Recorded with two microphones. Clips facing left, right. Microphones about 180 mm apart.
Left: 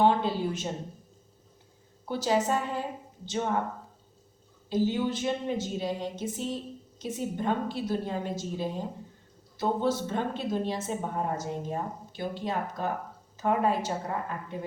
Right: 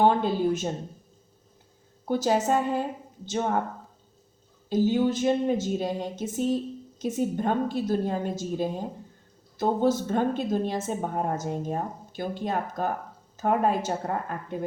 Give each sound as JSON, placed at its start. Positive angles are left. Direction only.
{"t": 0.0, "sound": "speech", "side_deg": -50}
{"t": 2.0, "sound": "a woman's voice", "side_deg": -50}
{"t": 4.7, "sound": "a woman's voice", "side_deg": -45}